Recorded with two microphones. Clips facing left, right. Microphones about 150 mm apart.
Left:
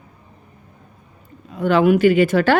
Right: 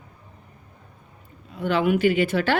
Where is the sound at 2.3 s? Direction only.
90° left.